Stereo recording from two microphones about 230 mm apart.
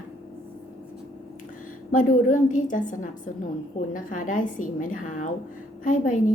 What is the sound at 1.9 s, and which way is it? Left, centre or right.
A woman's voice, left.